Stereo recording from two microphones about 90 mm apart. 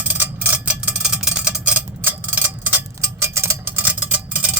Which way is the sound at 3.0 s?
30° right (ahead or behind).